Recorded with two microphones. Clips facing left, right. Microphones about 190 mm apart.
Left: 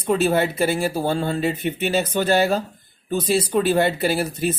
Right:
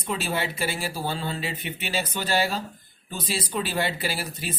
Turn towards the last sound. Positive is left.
turn(degrees=50)  # may be behind; listen again after turning